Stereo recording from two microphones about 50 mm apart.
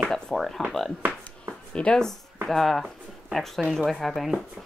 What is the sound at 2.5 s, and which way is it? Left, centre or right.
Speech, centre.